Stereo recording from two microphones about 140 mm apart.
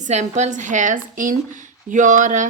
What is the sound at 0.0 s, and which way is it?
A woman's voice, 55° right (ahead or behind).